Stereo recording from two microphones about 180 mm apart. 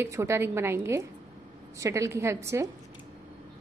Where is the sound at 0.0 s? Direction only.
15° right (ahead or behind).